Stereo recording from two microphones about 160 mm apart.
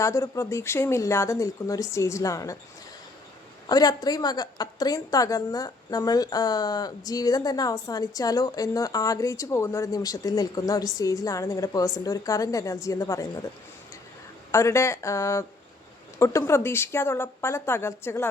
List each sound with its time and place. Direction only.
0.0 s a woman's voice: 20° left (ahead or behind)
3.7 s a woman's voice: 25° left (ahead or behind)
14.5 s a woman's voice: 15° left (ahead or behind)